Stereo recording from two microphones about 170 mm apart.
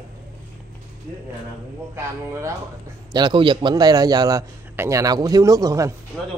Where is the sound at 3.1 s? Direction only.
25° right (ahead or behind).